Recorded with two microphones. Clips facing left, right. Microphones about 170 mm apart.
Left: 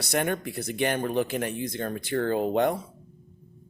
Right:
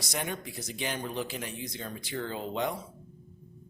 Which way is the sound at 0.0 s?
60° left (ahead or behind).